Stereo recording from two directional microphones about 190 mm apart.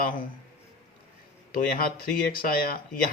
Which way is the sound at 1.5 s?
50° left (ahead or behind).